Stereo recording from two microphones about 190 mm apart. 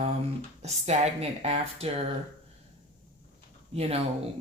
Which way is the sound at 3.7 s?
30° right (ahead or behind).